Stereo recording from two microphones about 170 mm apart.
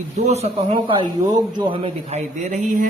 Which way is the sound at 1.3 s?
30° right (ahead or behind).